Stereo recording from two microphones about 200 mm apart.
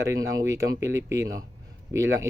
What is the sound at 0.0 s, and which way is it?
Speech, 15° right (ahead or behind).